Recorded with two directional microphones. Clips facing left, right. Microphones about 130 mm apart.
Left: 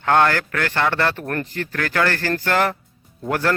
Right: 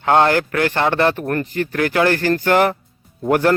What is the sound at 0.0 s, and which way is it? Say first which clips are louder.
Speech: right 3 dB; 20° right (ahead or behind).